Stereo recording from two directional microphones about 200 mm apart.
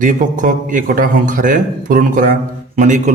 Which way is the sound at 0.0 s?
40° right (ahead or behind).